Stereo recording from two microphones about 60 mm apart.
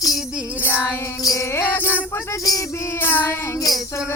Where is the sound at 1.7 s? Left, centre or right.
Left.